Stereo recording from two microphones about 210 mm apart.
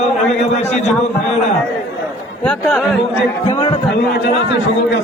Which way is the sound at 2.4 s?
5° left (ahead or behind).